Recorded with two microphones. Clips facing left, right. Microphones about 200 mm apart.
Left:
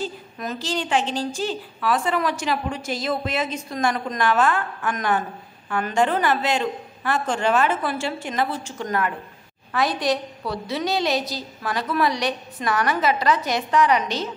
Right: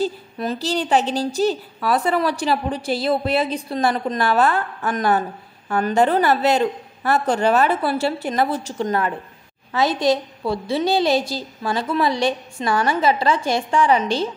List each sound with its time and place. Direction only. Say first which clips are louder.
0.0 s a woman's voice: right 6 dB; 35° right (ahead or behind)
8.8 s a woman's voice: right 2 dB; 30° right (ahead or behind)